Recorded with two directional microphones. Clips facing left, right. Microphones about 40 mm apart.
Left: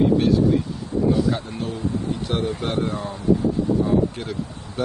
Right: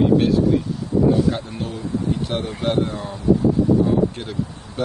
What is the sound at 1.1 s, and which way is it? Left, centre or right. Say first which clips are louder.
Speech: right 2 dB; right.